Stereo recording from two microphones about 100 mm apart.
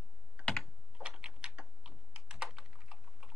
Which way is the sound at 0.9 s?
10° right (ahead or behind).